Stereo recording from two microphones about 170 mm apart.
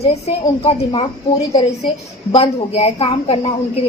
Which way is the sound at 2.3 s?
35° left (ahead or behind).